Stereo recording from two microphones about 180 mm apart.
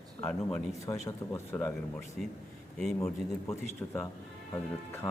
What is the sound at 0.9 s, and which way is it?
Speech, 10° left (ahead or behind).